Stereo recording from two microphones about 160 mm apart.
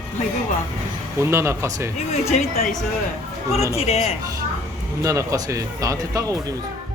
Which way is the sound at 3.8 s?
40° left (ahead or behind).